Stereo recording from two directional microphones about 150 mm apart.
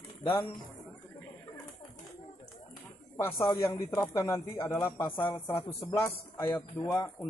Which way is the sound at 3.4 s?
15° left (ahead or behind).